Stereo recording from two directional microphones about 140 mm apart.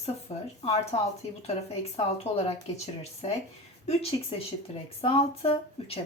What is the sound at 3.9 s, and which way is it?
Speech, 45° left (ahead or behind).